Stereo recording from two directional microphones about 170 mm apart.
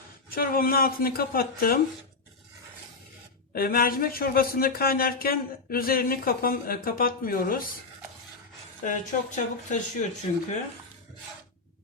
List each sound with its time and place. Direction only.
0.3 s speech: 60° left (ahead or behind)
3.5 s speech: 60° left (ahead or behind)
8.8 s speech: 50° left (ahead or behind)